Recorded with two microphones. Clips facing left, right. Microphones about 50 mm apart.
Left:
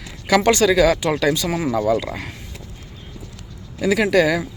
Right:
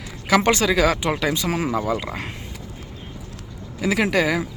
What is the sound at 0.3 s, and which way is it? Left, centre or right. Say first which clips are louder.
Speech: left 3 dB; right.